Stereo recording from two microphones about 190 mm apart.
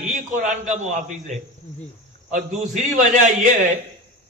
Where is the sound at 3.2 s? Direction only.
40° right (ahead or behind).